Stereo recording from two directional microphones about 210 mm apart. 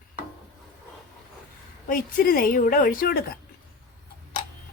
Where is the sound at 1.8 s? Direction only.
45° left (ahead or behind).